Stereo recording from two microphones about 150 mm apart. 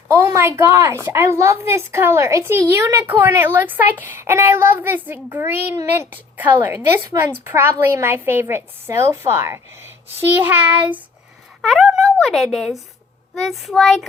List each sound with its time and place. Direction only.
0.1 s a woman's voice: 20° right (ahead or behind)
11.6 s speech: centre (ahead or behind)